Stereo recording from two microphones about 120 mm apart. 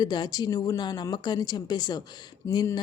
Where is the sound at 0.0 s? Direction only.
35° left (ahead or behind).